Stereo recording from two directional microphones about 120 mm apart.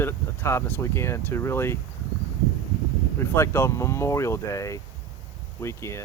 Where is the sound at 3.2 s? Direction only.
20° left (ahead or behind).